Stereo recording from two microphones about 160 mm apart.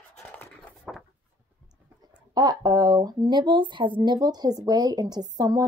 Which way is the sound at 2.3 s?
25° right (ahead or behind).